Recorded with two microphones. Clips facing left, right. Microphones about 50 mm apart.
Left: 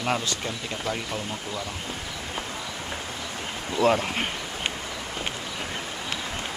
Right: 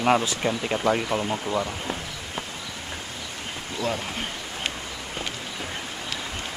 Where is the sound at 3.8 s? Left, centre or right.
Left.